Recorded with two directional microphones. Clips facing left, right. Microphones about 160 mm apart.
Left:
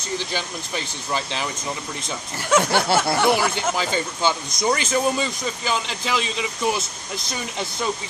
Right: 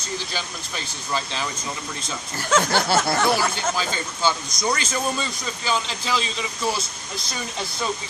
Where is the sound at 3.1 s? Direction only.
10° left (ahead or behind).